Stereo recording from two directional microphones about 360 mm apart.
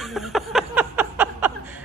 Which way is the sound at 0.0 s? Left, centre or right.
Centre.